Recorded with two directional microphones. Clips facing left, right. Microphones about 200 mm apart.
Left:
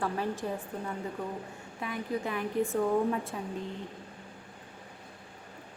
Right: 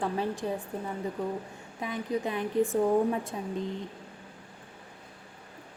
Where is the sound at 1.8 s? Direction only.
20° right (ahead or behind).